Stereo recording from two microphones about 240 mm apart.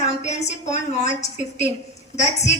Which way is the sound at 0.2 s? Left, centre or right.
Left.